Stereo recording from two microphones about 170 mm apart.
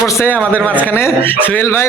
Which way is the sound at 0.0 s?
15° left (ahead or behind).